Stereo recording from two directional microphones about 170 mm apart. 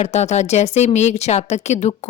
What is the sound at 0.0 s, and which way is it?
A woman's voice, 40° left (ahead or behind).